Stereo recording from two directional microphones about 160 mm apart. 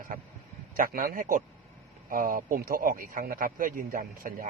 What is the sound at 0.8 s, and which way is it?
A man's voice, 60° right (ahead or behind).